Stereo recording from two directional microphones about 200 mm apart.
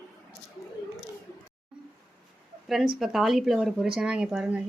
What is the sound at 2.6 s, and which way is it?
Speech, centre (ahead or behind).